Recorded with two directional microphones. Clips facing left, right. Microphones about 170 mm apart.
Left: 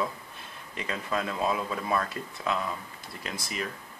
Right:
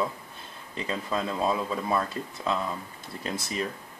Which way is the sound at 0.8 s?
25° right (ahead or behind).